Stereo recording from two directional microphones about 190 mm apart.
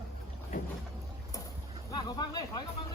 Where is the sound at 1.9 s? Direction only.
20° left (ahead or behind).